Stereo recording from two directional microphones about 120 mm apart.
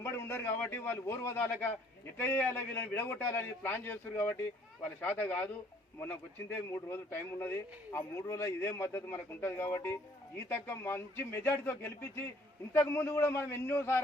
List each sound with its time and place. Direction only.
0.0 s a man's voice: 20° left (ahead or behind)